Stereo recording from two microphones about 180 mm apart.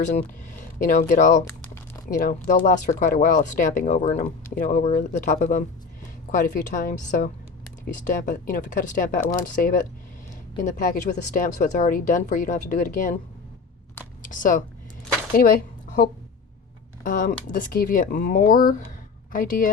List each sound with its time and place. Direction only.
0.9 s a woman's voice: 50° left (ahead or behind)
14.2 s a sound: 45° left (ahead or behind)
15.4 s a woman's voice: 55° left (ahead or behind)